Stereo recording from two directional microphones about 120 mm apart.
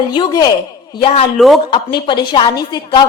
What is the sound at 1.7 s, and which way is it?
A woman's voice, 40° left (ahead or behind).